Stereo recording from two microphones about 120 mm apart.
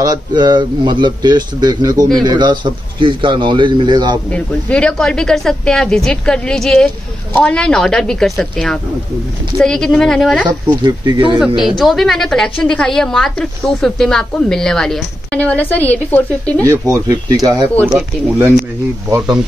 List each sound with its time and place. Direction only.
0.0 s a man's voice: 35° right (ahead or behind)
4.3 s a woman's voice: 10° left (ahead or behind)
10.8 s a man's voice: 35° right (ahead or behind)
11.3 s a woman's voice: 5° right (ahead or behind); by 16.6 s 15° left (ahead or behind)
16.6 s speech: 25° right (ahead or behind)
17.8 s speech: 5° right (ahead or behind)
19.0 s speech: 30° right (ahead or behind)